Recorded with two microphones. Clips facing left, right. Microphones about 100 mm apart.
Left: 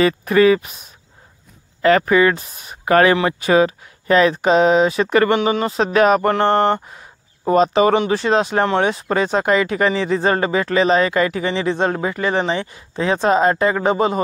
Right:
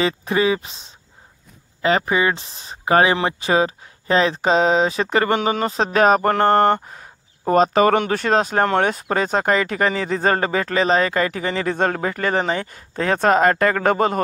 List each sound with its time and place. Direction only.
0.0 s speech: 25° right (ahead or behind); by 14.2 s 50° right (ahead or behind)